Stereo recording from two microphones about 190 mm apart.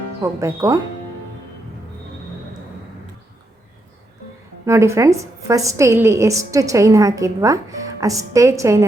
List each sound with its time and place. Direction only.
0.2 s a woman's voice: 15° right (ahead or behind)
4.6 s a woman's voice: 15° right (ahead or behind)